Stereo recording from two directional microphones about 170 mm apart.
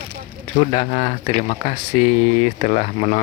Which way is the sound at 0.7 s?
40° left (ahead or behind).